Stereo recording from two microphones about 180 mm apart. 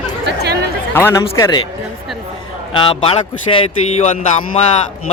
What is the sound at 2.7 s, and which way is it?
A man's voice, 30° left (ahead or behind).